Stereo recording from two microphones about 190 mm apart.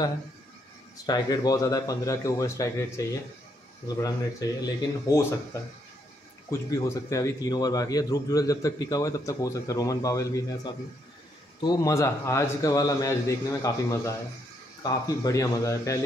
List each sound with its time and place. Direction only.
1.0 s a man's voice: 20° left (ahead or behind)